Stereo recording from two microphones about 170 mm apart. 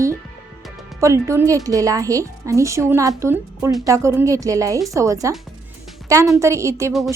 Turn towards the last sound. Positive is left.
turn(degrees=-15)  # may be behind; listen again after turning